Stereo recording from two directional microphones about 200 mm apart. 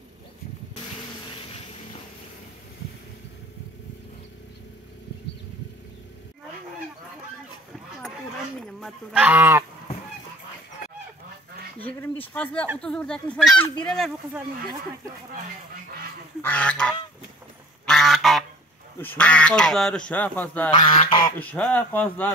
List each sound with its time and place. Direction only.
1.3 s vehicle: 30° left (ahead or behind)
8.5 s livestock: centre (ahead or behind)
11.8 s speech: 10° left (ahead or behind)
16.4 s speech: 5° left (ahead or behind)
17.8 s goose: centre (ahead or behind)
18.9 s speech: 10° left (ahead or behind)
20.7 s fowl: 25° left (ahead or behind)
21.4 s speech: 5° left (ahead or behind)